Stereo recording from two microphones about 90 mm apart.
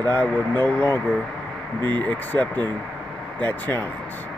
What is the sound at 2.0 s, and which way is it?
Speech, 15° left (ahead or behind).